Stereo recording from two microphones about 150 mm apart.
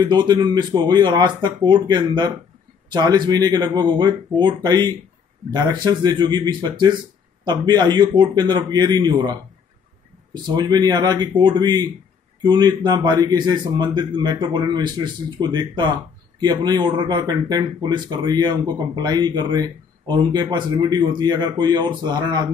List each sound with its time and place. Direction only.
0.0 s a man's voice: 30° right (ahead or behind)